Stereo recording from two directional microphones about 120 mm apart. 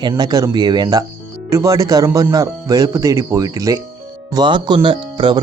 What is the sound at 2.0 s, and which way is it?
Speech, 20° right (ahead or behind).